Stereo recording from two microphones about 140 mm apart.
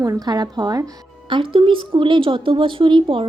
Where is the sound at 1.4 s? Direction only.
40° right (ahead or behind).